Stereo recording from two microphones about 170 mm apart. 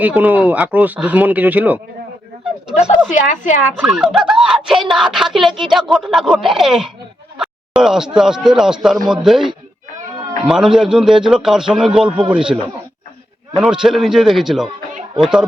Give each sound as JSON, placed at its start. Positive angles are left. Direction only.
{"t": 0.0, "sound": "speech", "side_deg": -10}
{"t": 2.7, "sound": "a woman's voice", "side_deg": 40}
{"t": 3.8, "sound": "speech", "side_deg": -5}
{"t": 13.6, "sound": "speech", "side_deg": -5}